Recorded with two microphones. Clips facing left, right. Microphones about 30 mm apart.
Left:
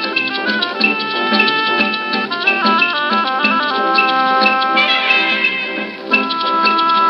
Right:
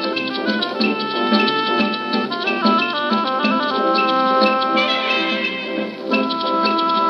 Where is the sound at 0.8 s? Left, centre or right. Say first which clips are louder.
Left 4 dB; left.